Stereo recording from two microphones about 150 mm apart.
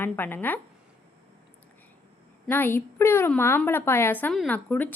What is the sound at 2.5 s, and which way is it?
A woman's voice, 15° left (ahead or behind).